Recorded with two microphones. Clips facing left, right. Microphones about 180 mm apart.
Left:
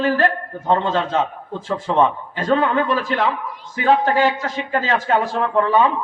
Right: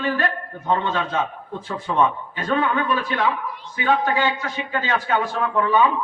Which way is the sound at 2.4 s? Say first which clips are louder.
Left 4 dB; 40° left (ahead or behind).